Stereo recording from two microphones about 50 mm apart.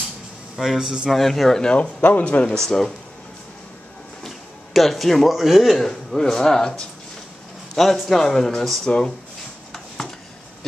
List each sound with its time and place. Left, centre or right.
0.6 s speech: centre
1.1 s a man's voice: centre
1.6 s speech: left
2.6 s a man's voice: centre
4.7 s a man's voice: centre
5.9 s a man's voice: centre
9.7 s a sound: centre